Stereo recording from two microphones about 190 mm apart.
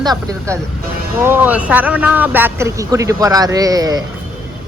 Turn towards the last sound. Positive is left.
turn(degrees=-20)  # may be behind; listen again after turning